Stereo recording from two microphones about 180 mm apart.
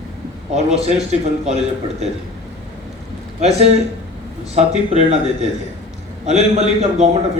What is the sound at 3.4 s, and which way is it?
A man's voice, 35° right (ahead or behind).